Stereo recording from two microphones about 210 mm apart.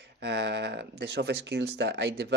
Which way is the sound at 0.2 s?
55° right (ahead or behind).